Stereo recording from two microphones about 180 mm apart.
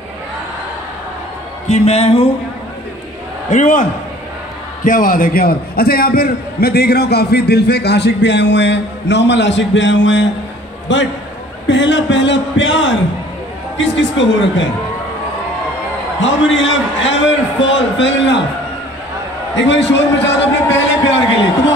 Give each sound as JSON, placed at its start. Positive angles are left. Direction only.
{"t": 1.7, "sound": "music", "side_deg": 35}
{"t": 3.4, "sound": "a man's voice", "side_deg": 45}
{"t": 4.8, "sound": "a man's voice", "side_deg": 50}
{"t": 16.2, "sound": "a man's voice", "side_deg": 90}
{"t": 19.5, "sound": "a man's voice", "side_deg": 80}